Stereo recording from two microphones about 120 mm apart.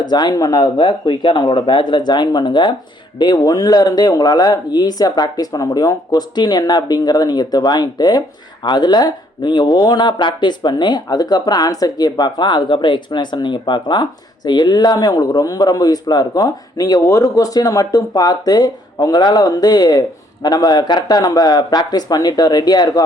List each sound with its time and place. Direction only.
0.0 s speech: 35° left (ahead or behind)